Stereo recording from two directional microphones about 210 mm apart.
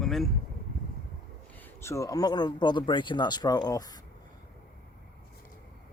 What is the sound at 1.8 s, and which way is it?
Speech, 15° left (ahead or behind).